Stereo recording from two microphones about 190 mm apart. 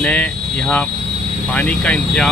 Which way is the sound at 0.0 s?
5° left (ahead or behind).